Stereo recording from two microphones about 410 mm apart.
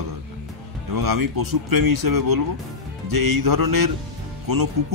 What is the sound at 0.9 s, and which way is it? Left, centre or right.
Speech, right.